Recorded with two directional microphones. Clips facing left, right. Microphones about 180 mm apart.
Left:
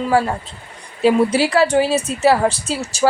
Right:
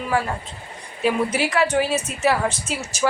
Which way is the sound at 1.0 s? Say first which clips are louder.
Left 7 dB; 30° left (ahead or behind).